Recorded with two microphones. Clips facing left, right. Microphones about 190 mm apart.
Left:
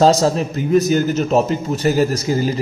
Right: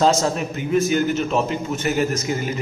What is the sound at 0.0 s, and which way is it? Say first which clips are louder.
A man's voice: left 5 dB; 35° left (ahead or behind).